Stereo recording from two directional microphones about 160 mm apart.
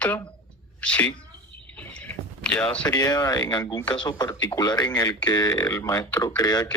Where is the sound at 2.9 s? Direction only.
25° left (ahead or behind).